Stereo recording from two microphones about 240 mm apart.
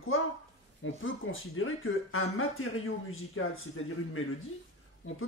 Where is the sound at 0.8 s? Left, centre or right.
Left.